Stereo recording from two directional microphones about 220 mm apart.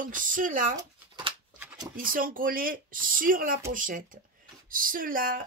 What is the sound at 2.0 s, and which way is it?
Speech, 40° right (ahead or behind).